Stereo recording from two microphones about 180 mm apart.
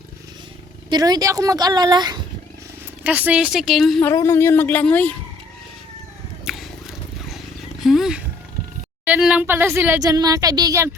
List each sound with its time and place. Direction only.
0.9 s a woman's voice: 25° right (ahead or behind)
3.0 s a woman's voice: 10° right (ahead or behind)
4.0 s speech: 15° left (ahead or behind)
6.4 s vehicle: centre (ahead or behind)
7.8 s roaring cats: centre (ahead or behind)
9.0 s a sound: 5° right (ahead or behind)
10.0 s a woman's voice: 20° right (ahead or behind)